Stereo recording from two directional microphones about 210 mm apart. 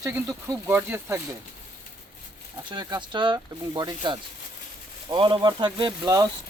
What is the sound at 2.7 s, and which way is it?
Speech, 20° right (ahead or behind).